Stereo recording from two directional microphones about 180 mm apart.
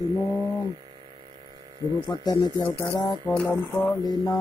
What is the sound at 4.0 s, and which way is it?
Speech, 20° left (ahead or behind).